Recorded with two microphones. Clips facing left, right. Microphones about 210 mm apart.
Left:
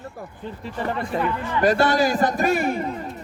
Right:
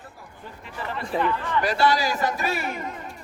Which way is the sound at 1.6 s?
50° left (ahead or behind).